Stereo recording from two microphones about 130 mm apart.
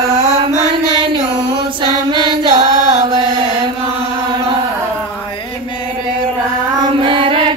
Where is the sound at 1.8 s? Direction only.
35° right (ahead or behind).